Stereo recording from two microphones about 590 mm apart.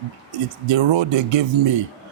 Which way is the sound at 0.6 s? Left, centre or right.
Right.